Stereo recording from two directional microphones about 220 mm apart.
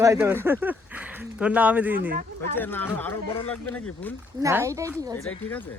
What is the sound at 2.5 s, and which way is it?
Speech, 10° left (ahead or behind).